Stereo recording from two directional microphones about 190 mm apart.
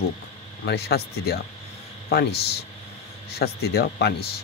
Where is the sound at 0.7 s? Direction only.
60° left (ahead or behind).